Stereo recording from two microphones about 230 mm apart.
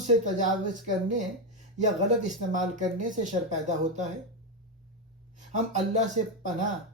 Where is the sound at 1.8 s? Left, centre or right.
Right.